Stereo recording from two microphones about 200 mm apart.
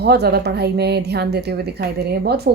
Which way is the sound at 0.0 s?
55° right (ahead or behind).